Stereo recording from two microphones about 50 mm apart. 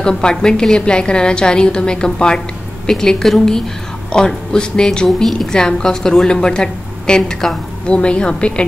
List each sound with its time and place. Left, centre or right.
0.0 s a woman's voice: centre
7.9 s a woman's voice: left